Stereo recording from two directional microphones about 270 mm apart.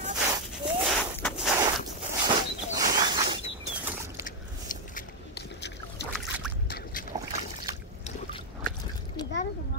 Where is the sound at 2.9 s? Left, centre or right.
Centre.